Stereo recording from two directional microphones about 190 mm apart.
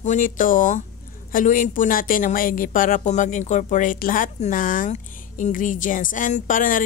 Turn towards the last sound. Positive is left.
turn(degrees=45)  # may be behind; listen again after turning